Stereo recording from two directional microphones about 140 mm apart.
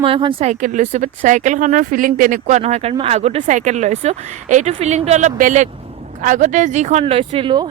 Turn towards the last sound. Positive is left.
turn(degrees=-35)  # may be behind; listen again after turning